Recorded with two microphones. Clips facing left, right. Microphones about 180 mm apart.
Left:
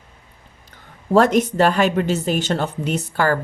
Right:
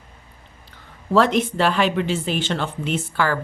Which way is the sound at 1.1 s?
45° left (ahead or behind).